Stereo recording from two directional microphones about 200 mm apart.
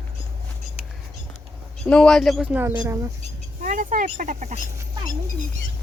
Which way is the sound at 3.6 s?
40° right (ahead or behind).